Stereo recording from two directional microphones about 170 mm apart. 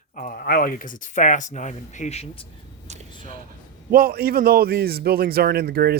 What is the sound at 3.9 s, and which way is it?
A man's voice, 60° right (ahead or behind).